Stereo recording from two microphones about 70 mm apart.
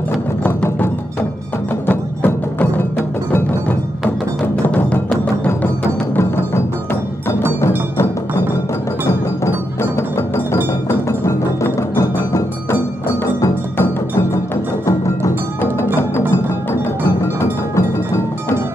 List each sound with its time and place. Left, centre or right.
1.9 s music: left
6.1 s music: left
9.0 s music: left
13.7 s music: left
14.9 s music: left
17.4 s music: left